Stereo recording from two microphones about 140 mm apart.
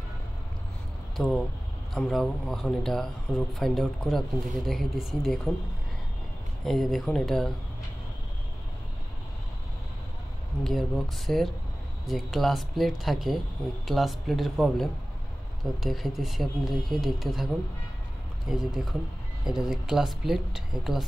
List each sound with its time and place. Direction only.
1.1 s speech: centre (ahead or behind)
6.6 s speech: centre (ahead or behind)
10.6 s speech: centre (ahead or behind)
18.5 s speech: 5° right (ahead or behind)